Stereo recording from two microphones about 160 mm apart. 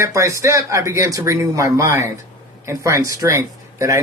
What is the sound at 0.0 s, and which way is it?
Speech, 20° right (ahead or behind).